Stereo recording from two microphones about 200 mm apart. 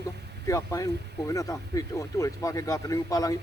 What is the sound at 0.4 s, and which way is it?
Speech, 15° left (ahead or behind).